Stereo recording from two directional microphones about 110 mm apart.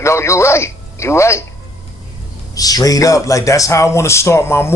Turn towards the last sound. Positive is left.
turn(degrees=25)  # may be behind; listen again after turning